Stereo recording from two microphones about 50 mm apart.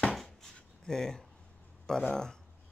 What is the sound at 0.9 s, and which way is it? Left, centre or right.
Speech, centre.